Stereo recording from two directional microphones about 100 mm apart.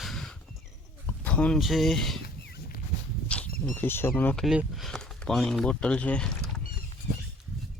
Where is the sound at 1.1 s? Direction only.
15° left (ahead or behind).